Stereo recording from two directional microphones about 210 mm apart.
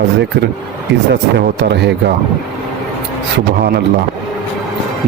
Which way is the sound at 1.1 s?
55° right (ahead or behind).